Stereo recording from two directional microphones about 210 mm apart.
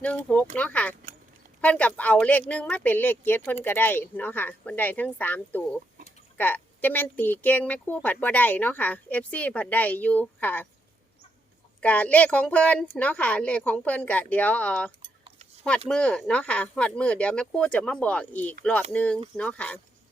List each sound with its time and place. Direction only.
0.0 s speech: 5° left (ahead or behind)
11.8 s speech: 5° left (ahead or behind)
15.0 s a sound: 25° right (ahead or behind)
15.9 s speech: 5° left (ahead or behind)